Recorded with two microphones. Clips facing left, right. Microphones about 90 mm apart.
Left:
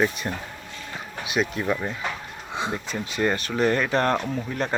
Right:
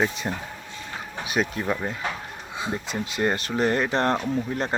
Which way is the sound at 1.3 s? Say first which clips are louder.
Left 1 dB; 40° right (ahead or behind).